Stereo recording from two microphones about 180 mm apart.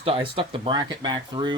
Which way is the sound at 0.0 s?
30° right (ahead or behind).